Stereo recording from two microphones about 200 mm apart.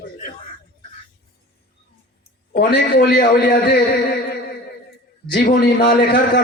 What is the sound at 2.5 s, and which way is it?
A man's voice, 50° left (ahead or behind).